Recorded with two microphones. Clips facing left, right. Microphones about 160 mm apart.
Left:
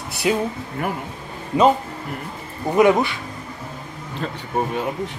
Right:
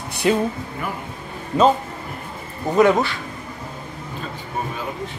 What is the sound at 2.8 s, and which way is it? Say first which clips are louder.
Speech: even; 15° left (ahead or behind).